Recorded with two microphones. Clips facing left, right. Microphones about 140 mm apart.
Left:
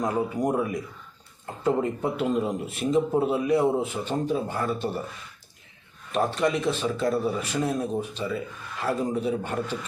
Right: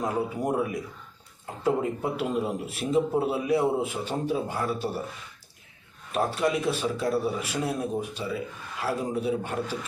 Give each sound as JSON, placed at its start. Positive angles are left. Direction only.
{"t": 0.0, "sound": "a man's voice", "side_deg": -5}
{"t": 6.1, "sound": "a man's voice", "side_deg": -5}